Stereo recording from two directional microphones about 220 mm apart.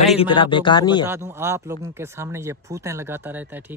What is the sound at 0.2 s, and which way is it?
Speech, 20° left (ahead or behind).